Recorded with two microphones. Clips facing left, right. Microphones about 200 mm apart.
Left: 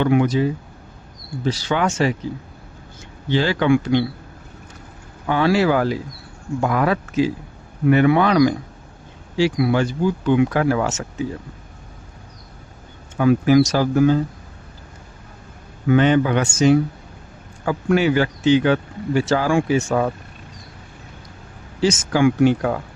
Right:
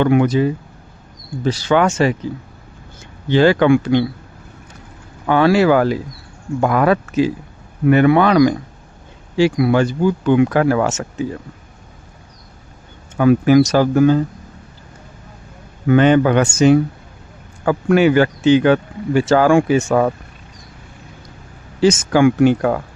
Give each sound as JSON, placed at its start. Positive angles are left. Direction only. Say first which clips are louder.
{"t": 0.0, "sound": "speech", "louder": "right 3 dB", "side_deg": -55}
{"t": 1.5, "sound": "speech", "louder": "right 5 dB", "side_deg": -60}
{"t": 3.2, "sound": "speech", "louder": "right 6 dB", "side_deg": -55}
{"t": 5.3, "sound": "speech", "louder": "right 4 dB", "side_deg": -60}
{"t": 13.1, "sound": "speech", "louder": "right 3 dB", "side_deg": -60}
{"t": 15.9, "sound": "speech", "louder": "right 4 dB", "side_deg": -60}
{"t": 21.8, "sound": "speech", "louder": "right 5 dB", "side_deg": -55}